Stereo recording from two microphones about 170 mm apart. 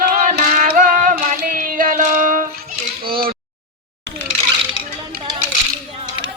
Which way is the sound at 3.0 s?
60° right (ahead or behind).